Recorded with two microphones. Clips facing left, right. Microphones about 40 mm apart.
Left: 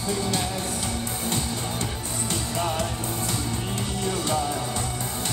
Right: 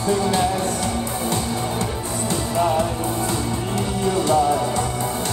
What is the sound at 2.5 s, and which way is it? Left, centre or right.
Music, centre.